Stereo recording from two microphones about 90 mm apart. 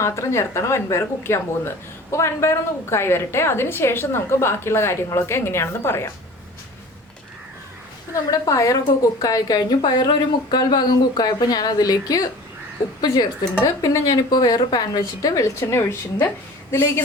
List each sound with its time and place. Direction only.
0.0 s a woman's voice: 30° left (ahead or behind)
8.1 s a woman's voice: 40° left (ahead or behind)
13.7 s a woman's voice: 40° left (ahead or behind)